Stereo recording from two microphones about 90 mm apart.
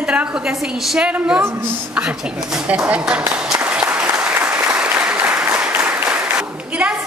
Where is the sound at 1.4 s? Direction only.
25° right (ahead or behind).